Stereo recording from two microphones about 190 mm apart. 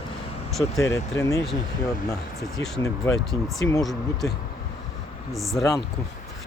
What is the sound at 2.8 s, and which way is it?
Speech, 15° left (ahead or behind).